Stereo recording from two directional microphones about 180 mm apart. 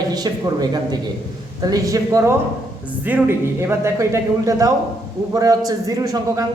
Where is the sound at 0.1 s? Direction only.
20° right (ahead or behind).